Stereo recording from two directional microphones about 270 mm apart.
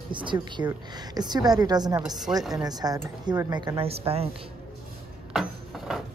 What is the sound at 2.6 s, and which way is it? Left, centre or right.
A woman's voice, centre.